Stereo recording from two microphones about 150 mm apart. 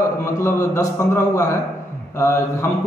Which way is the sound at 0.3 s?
20° left (ahead or behind).